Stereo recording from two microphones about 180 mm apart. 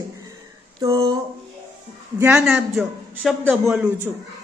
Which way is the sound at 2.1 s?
10° right (ahead or behind).